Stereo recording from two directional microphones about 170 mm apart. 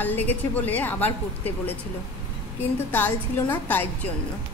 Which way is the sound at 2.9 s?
10° left (ahead or behind).